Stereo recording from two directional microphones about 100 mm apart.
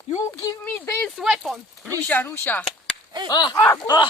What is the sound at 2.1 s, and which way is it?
Speech, 20° left (ahead or behind).